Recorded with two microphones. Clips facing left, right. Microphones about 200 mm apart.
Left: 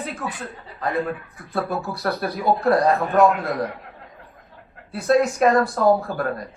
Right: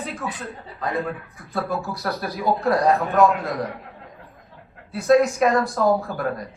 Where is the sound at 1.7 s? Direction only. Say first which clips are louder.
Left 1 dB; centre (ahead or behind).